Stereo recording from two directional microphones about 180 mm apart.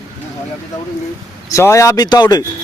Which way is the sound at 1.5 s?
15° left (ahead or behind).